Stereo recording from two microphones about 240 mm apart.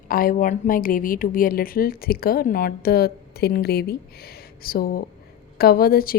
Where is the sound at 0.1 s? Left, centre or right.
Left.